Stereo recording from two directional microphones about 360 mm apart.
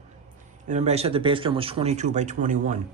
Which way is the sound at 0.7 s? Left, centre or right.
Centre.